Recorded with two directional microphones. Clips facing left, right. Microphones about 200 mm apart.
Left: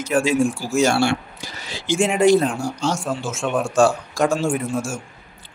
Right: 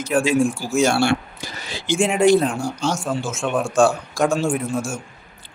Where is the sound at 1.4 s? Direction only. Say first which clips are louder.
Right 1 dB; 55° right (ahead or behind).